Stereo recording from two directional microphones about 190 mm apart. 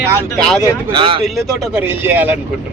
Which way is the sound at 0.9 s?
30° right (ahead or behind).